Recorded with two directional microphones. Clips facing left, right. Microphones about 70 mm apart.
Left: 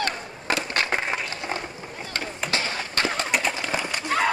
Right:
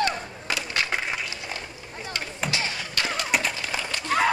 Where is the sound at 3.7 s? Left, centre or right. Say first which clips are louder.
Left 2 dB; left.